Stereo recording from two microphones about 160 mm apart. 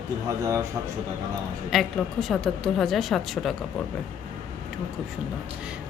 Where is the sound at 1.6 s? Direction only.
Centre (ahead or behind).